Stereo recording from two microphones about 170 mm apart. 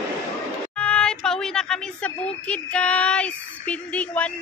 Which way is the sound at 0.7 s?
5° left (ahead or behind).